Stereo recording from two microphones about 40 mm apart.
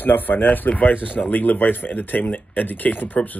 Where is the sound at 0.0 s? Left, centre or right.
Left.